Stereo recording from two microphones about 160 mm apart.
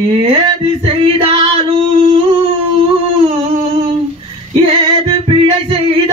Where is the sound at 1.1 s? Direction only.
35° right (ahead or behind).